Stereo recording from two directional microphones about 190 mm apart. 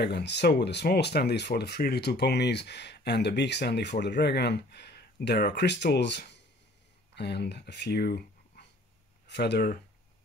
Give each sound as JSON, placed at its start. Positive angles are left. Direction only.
{"t": 0.0, "sound": "speech", "side_deg": 60}